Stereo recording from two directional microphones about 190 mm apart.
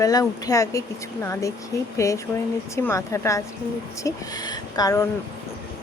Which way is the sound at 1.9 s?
15° left (ahead or behind).